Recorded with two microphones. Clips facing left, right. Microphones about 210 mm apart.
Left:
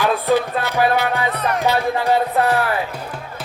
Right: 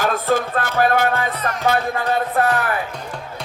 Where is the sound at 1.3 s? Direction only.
65° left (ahead or behind).